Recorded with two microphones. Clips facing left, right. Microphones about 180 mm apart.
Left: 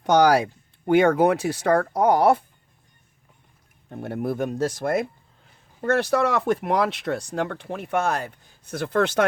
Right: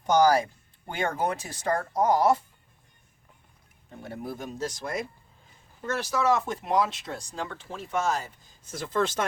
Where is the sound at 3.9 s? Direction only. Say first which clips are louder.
Left 9 dB; 65° left (ahead or behind).